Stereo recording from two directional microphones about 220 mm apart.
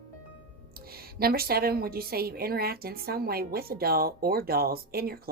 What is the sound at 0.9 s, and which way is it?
A woman's voice, 45° right (ahead or behind).